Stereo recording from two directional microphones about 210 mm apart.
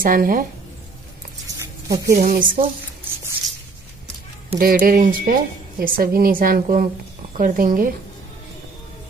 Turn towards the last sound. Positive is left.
turn(degrees=-40)  # may be behind; listen again after turning